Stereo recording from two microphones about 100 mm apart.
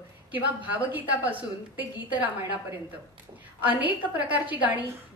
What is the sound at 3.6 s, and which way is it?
A woman's voice, 15° right (ahead or behind).